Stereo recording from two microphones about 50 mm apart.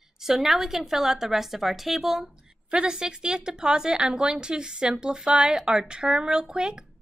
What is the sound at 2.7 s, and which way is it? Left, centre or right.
A woman's voice, centre.